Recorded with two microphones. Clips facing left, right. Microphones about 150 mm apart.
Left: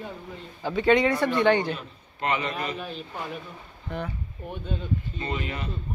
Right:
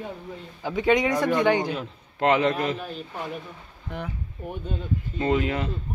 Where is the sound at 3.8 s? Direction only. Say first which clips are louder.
Left 1 dB; 10° right (ahead or behind).